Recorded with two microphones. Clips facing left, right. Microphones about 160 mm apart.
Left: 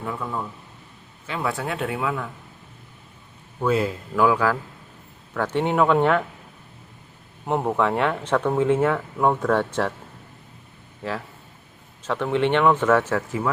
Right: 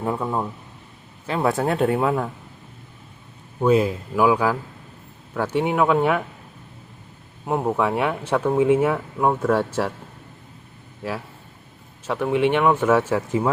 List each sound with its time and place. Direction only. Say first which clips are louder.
0.0 s speech: right 5 dB; 35° right (ahead or behind)
3.6 s speech: right 4 dB; 20° right (ahead or behind)
7.4 s speech: even; 10° right (ahead or behind)
12.0 s speech: right 2 dB; 10° right (ahead or behind)